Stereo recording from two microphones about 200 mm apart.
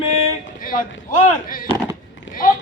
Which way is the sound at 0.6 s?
45° left (ahead or behind).